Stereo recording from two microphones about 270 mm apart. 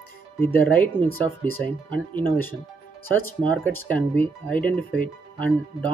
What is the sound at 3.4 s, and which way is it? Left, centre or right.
Speech, centre.